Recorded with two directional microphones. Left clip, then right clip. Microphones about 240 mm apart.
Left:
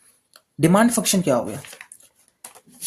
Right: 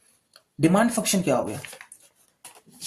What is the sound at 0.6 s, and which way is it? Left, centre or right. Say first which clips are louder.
Speech: left 3 dB; left.